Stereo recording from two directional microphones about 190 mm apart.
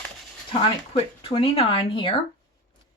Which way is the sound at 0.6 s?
30° left (ahead or behind).